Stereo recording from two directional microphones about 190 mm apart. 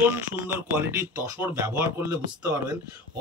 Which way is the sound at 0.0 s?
10° right (ahead or behind).